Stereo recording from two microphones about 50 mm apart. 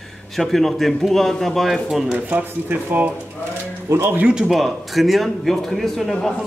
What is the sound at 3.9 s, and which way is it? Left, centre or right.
Speech, right.